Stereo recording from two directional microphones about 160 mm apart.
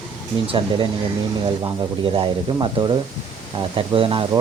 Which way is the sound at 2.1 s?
30° right (ahead or behind).